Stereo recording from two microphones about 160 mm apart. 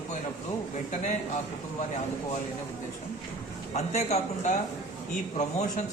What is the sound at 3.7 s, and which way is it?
Speech, 45° left (ahead or behind).